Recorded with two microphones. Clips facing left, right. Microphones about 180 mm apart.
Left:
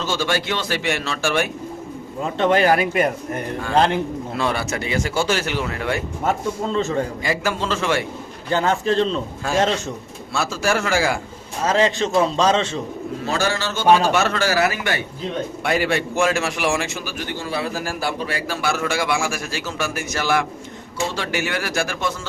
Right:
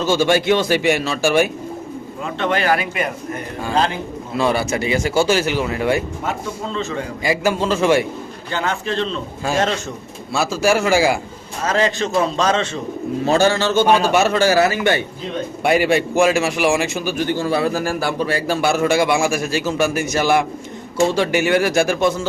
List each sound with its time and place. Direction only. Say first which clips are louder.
0.2 s a man's voice: right 7 dB; 15° right (ahead or behind)
2.2 s speech: left 3 dB; 35° left (ahead or behind)
4.4 s a man's voice: right 6 dB; 5° right (ahead or behind)
7.3 s a man's voice: right 4 dB; 10° right (ahead or behind)
8.5 s speech: left 3 dB; 40° left (ahead or behind)
10.3 s a man's voice: right 4 dB; 10° right (ahead or behind)
11.6 s a man's voice: even; 15° left (ahead or behind)
11.9 s a man's voice: even; 30° left (ahead or behind)
13.2 s a man's voice: right 7 dB; 25° right (ahead or behind)
15.6 s a man's voice: right 6 dB; 15° right (ahead or behind)
17.2 s a man's voice: right 7 dB; 35° right (ahead or behind); by 22.3 s 15° right (ahead or behind)